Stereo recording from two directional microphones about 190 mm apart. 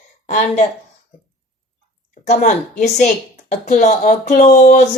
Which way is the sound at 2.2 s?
40° left (ahead or behind).